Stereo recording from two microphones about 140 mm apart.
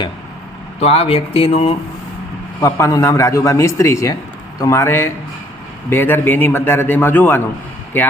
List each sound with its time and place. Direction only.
0.8 s speech: 45° left (ahead or behind)
2.6 s a man's voice: 20° left (ahead or behind)